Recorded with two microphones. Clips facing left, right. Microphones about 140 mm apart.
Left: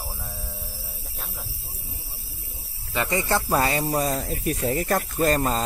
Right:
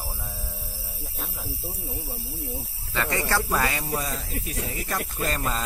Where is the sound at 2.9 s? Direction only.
20° left (ahead or behind).